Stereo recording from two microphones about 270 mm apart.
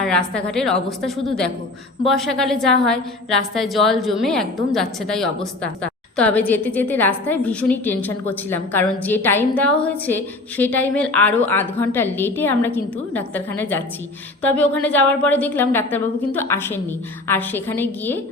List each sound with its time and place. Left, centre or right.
0.0 s a woman's voice: centre